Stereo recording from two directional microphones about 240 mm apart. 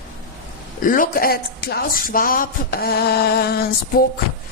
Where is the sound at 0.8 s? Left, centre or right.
Left.